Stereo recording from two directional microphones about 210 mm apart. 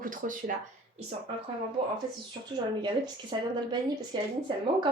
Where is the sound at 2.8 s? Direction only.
20° right (ahead or behind).